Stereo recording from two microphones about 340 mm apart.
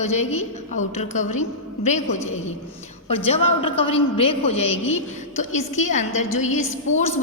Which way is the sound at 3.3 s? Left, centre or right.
Centre.